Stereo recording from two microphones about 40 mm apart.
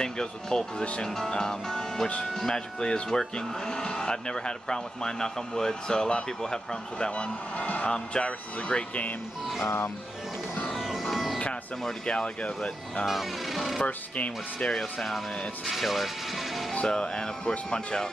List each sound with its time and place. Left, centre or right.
0.0 s speech: centre
7.1 s speech: left
7.9 s speech: left
10.7 s music: centre
12.1 s speech: left
13.0 s speech: centre
13.8 s speech: left
14.7 s speech: centre
16.7 s speech: left